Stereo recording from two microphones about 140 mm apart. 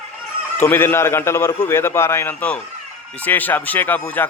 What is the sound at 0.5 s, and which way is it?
A man's voice, 15° left (ahead or behind).